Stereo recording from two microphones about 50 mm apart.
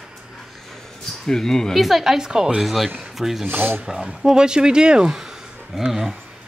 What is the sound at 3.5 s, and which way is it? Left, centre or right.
Speech, right.